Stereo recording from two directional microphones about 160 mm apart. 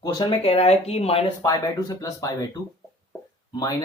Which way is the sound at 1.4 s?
20° left (ahead or behind).